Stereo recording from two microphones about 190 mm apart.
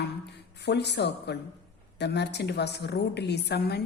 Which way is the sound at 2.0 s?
65° left (ahead or behind).